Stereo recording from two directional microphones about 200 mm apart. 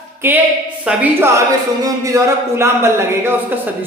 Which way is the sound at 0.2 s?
10° right (ahead or behind).